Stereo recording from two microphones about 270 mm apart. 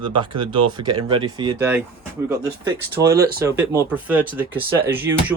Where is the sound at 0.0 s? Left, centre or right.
Centre.